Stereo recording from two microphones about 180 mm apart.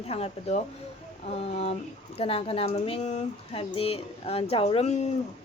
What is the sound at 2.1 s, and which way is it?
Speech, 30° left (ahead or behind).